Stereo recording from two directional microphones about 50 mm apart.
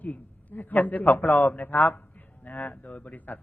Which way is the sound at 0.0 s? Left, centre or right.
Left.